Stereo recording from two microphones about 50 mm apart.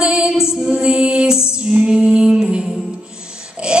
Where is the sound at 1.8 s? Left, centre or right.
Centre.